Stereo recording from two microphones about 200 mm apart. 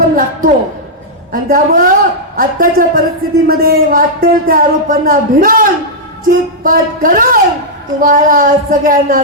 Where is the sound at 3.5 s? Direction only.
50° right (ahead or behind).